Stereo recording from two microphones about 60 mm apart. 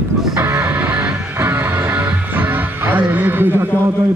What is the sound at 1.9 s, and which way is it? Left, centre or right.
Music, right.